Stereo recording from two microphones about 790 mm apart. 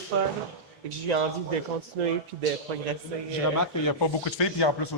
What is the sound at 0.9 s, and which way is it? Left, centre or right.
Speech, right.